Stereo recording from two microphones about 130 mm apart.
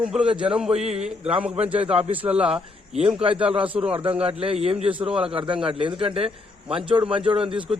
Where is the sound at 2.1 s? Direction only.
10° right (ahead or behind).